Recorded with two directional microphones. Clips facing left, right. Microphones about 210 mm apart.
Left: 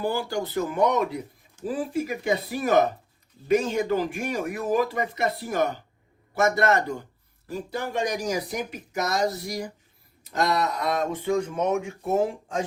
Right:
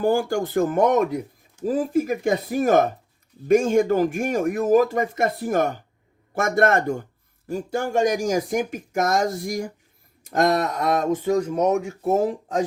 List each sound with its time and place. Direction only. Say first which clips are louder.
0.0 s speech: right 6 dB; 50° right (ahead or behind)